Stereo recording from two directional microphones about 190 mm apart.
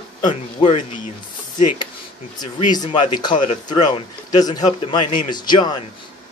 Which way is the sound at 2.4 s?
20° left (ahead or behind).